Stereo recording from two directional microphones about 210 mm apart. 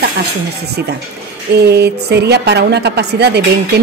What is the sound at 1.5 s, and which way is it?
Speech, 50° right (ahead or behind).